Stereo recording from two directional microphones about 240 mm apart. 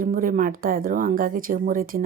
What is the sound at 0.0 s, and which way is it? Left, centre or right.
Speech, right.